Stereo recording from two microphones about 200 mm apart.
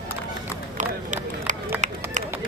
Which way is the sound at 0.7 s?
40° right (ahead or behind).